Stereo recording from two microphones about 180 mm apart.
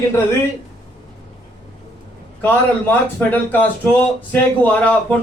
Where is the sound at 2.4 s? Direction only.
10° left (ahead or behind).